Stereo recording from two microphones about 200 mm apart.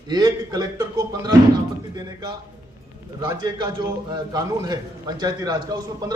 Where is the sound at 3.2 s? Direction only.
20° right (ahead or behind).